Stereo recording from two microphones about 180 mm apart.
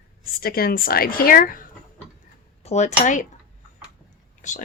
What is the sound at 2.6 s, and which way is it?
Speech, 40° left (ahead or behind).